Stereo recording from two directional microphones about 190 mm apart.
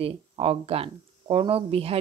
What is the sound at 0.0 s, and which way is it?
Speech, 30° right (ahead or behind).